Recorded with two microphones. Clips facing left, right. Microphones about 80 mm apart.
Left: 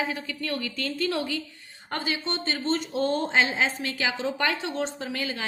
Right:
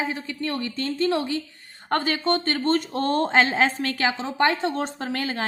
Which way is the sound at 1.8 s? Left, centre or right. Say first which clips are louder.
Right 7 dB; right.